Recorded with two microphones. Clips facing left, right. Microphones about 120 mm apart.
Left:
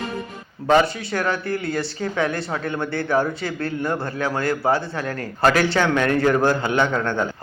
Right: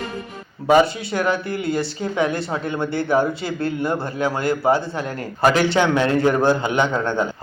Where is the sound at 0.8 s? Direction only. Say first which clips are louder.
Right 2 dB; 25° right (ahead or behind).